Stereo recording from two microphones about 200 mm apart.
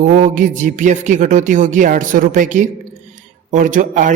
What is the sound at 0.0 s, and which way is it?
Speech, 40° right (ahead or behind).